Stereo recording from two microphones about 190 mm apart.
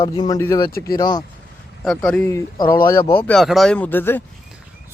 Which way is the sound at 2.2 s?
20° left (ahead or behind).